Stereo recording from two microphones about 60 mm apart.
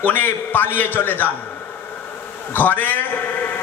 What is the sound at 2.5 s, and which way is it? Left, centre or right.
A man's voice, left.